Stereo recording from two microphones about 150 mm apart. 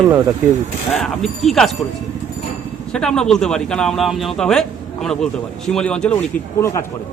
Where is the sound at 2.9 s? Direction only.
5° left (ahead or behind).